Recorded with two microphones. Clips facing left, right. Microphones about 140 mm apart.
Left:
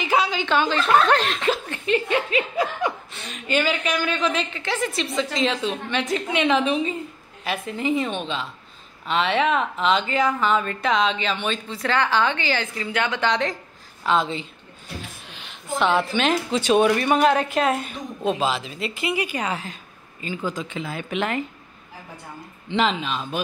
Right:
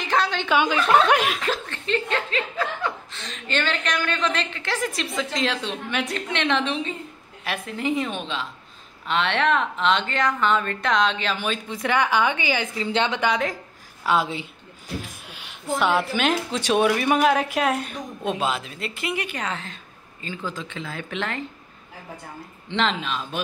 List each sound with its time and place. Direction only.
0.0 s a woman's voice: 5° left (ahead or behind)
0.5 s speech: 10° right (ahead or behind)
1.7 s a woman's voice: 10° left (ahead or behind); by 11.6 s 5° right (ahead or behind)
11.7 s speech: 15° right (ahead or behind)
12.8 s a woman's voice: 25° right (ahead or behind)
13.3 s a woman's voice: 5° right (ahead or behind); by 21.5 s 15° left (ahead or behind)
22.7 s a woman's voice: 5° left (ahead or behind)